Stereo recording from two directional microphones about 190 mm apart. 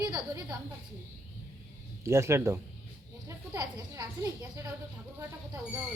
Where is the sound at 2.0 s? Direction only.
15° right (ahead or behind).